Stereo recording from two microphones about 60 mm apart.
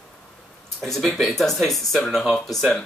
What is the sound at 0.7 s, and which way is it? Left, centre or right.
Speech, centre.